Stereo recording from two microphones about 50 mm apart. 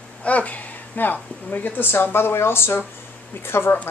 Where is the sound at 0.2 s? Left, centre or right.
Left.